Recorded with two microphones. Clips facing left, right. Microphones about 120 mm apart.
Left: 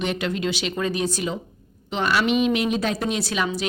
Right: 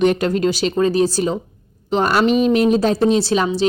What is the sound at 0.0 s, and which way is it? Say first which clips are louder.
Speech: right 9 dB; 45° right (ahead or behind).